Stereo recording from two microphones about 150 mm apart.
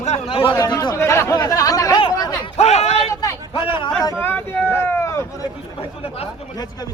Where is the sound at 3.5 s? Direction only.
35° left (ahead or behind).